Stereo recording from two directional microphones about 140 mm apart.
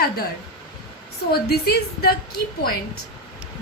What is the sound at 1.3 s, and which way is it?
Speech, 90° left.